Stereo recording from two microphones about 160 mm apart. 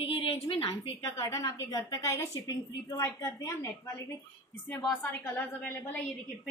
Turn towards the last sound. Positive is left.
turn(degrees=10)  # may be behind; listen again after turning